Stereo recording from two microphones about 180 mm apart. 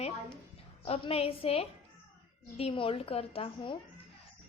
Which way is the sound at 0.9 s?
35° left (ahead or behind).